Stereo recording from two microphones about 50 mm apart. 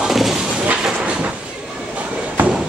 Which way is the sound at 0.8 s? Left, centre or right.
Right.